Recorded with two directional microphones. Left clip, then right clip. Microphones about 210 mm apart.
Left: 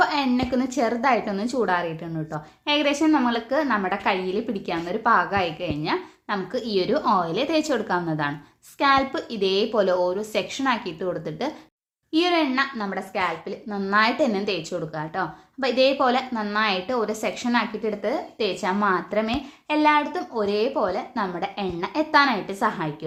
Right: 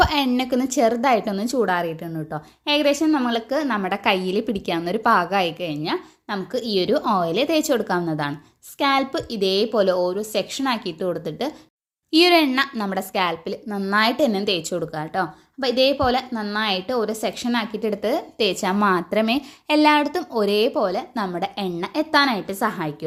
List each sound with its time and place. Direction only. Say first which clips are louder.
0.0 s a woman's voice: right 2 dB; 35° right (ahead or behind)
12.1 s a woman's voice: right 5 dB; 45° right (ahead or behind)
17.8 s speech: right 3 dB; 40° right (ahead or behind)